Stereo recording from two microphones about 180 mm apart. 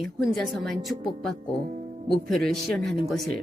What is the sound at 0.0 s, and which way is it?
Speech, centre (ahead or behind).